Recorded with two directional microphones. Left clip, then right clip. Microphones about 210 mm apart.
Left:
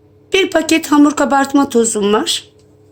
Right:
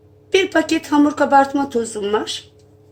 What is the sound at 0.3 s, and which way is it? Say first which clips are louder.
Speech: left 3 dB; 40° left (ahead or behind).